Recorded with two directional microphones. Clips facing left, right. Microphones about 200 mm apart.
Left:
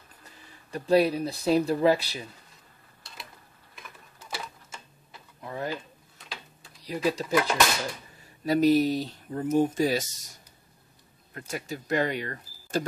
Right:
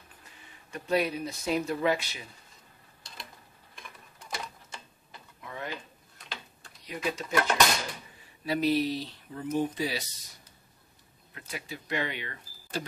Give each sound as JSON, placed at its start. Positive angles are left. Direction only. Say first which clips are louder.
{"t": 0.7, "sound": "speech", "louder": "left 6 dB", "side_deg": 35}
{"t": 3.7, "sound": "tick-tock", "louder": "left 1 dB", "side_deg": 5}
{"t": 5.4, "sound": "drawer open or close", "louder": "left 6 dB", "side_deg": 35}
{"t": 6.1, "sound": "tick-tock", "louder": "even", "side_deg": 0}
{"t": 7.1, "sound": "speech", "louder": "left 6 dB", "side_deg": 35}
{"t": 7.3, "sound": "speech", "louder": "even", "side_deg": 5}
{"t": 8.5, "sound": "speech", "louder": "left 6 dB", "side_deg": 45}